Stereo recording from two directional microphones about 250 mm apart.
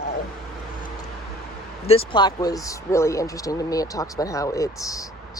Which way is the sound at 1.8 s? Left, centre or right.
Left.